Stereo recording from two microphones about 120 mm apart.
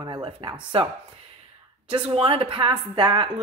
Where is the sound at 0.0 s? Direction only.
40° right (ahead or behind).